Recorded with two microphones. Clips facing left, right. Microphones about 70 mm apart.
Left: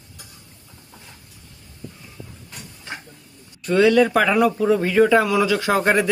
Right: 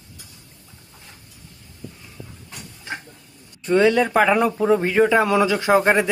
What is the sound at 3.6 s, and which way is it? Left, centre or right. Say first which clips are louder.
Speech: left 1 dB; right.